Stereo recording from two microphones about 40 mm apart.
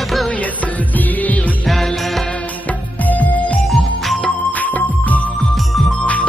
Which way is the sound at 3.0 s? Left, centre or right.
Left.